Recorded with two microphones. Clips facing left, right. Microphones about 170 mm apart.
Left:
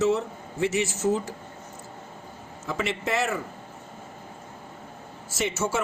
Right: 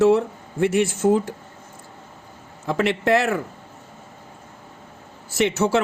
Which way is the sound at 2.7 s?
65° right (ahead or behind).